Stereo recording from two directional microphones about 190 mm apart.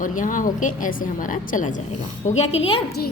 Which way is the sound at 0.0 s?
45° left (ahead or behind).